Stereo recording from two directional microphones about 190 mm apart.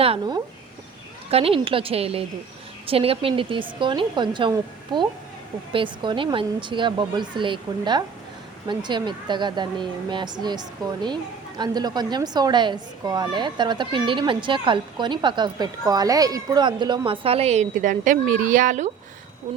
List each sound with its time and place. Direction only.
0.0 s a woman's voice: 25° right (ahead or behind); by 18.9 s 40° right (ahead or behind)